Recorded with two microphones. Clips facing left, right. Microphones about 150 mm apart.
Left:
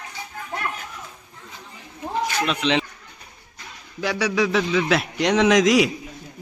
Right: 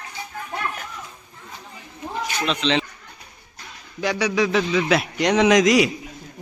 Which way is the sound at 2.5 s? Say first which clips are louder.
Right 3 dB; 10° left (ahead or behind).